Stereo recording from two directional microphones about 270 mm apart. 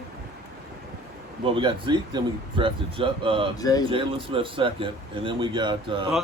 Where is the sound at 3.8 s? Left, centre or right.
Centre.